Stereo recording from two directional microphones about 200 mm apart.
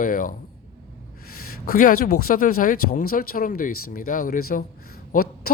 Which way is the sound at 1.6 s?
45° left (ahead or behind).